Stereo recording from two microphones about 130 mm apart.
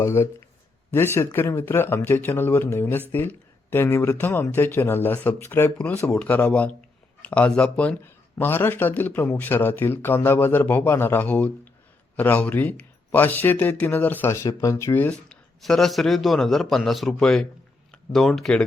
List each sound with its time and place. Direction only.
0.0 s speech: 20° left (ahead or behind)
15.6 s a man's voice: centre (ahead or behind)